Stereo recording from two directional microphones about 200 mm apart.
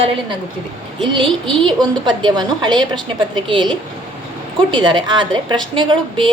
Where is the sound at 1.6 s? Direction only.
20° right (ahead or behind).